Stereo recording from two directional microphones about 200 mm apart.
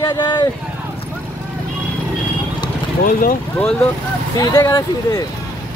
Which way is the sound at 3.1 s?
45° left (ahead or behind).